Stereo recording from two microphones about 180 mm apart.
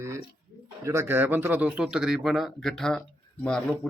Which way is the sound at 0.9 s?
15° right (ahead or behind).